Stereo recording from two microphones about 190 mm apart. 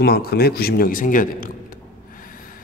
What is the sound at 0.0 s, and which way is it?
A man's voice, 55° left (ahead or behind).